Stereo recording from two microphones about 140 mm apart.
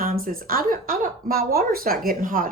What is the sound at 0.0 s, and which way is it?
Speech, 90° right.